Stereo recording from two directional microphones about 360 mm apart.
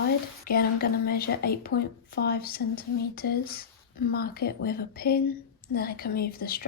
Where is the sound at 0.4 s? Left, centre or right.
Left.